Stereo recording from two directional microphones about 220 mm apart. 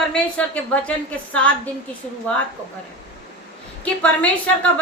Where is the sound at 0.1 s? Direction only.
5° left (ahead or behind).